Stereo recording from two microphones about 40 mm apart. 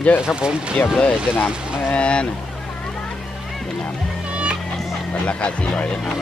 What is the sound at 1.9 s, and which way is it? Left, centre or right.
Speech, left.